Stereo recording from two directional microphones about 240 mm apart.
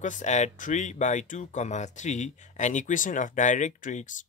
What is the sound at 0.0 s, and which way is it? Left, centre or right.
Speech, left.